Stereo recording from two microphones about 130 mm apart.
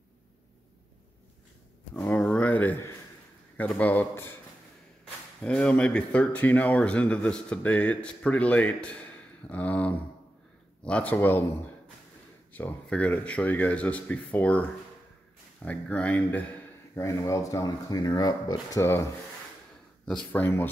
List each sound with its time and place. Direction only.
2.0 s a sound: 10° left (ahead or behind)
3.5 s speech: 10° left (ahead or behind)
5.4 s speech: 10° left (ahead or behind)
12.5 s speech: 10° left (ahead or behind)
16.9 s speech: 25° left (ahead or behind)
20.1 s speech: 5° left (ahead or behind)
20.4 s speech: 15° left (ahead or behind)